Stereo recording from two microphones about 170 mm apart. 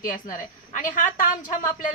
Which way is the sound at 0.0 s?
50° left (ahead or behind).